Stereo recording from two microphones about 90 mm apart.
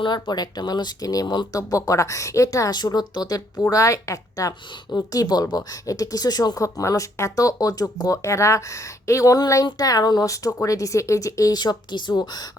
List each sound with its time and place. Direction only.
0.0 s a woman's voice: 55° left (ahead or behind)